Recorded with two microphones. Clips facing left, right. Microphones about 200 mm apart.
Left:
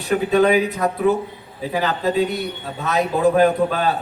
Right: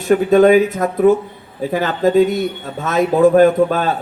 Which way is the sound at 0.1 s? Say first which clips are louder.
Right 6 dB; 45° right (ahead or behind).